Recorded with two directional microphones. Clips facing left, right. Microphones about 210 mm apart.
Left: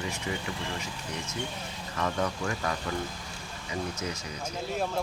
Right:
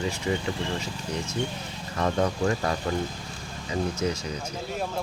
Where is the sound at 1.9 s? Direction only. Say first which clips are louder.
Right 5 dB; 35° right (ahead or behind).